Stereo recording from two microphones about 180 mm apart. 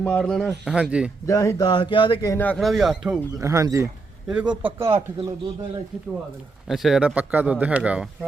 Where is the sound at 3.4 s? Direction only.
20° right (ahead or behind).